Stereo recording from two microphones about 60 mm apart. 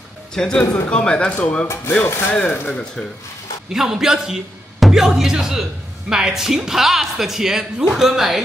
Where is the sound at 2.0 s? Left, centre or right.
Left.